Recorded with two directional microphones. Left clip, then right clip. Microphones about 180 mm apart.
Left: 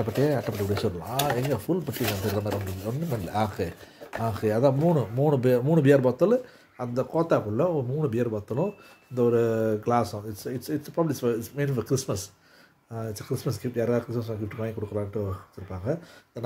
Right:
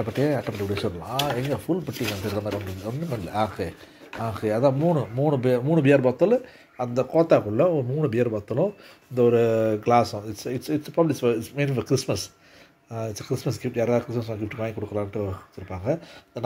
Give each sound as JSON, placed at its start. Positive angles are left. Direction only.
{"t": 0.0, "sound": "speech", "side_deg": 25}
{"t": 7.0, "sound": "speech", "side_deg": 5}